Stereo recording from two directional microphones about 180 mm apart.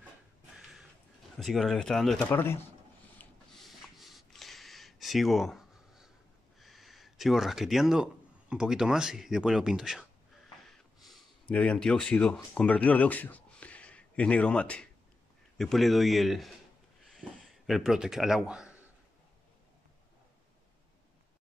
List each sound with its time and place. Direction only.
1.4 s speech: centre (ahead or behind)
3.2 s a sound: centre (ahead or behind)
6.6 s speech: centre (ahead or behind)